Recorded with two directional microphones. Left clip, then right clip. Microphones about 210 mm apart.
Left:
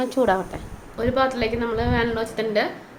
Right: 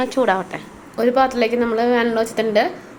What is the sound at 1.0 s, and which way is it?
Speech, 25° right (ahead or behind).